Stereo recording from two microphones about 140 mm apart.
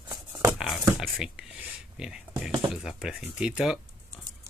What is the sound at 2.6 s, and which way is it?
Speech, 5° right (ahead or behind).